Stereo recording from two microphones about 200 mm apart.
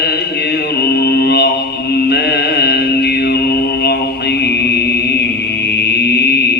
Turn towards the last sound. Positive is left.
turn(degrees=55)  # may be behind; listen again after turning